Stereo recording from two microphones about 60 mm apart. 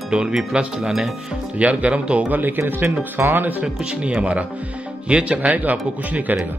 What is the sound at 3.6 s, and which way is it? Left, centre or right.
Speech, centre.